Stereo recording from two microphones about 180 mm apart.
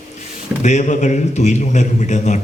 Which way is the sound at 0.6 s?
40° left (ahead or behind).